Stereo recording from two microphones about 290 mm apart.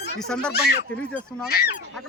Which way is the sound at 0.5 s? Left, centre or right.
Left.